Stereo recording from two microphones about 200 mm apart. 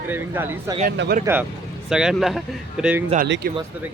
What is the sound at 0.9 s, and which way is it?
Speech, 50° right (ahead or behind).